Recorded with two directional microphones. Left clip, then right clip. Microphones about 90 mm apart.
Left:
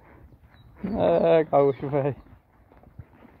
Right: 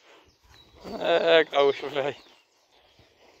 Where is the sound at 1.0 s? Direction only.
5° left (ahead or behind).